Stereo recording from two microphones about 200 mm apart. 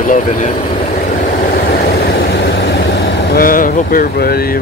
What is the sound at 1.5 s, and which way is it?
Vehicle, 50° left (ahead or behind).